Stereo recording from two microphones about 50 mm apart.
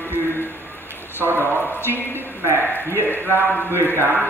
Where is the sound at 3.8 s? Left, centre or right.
Left.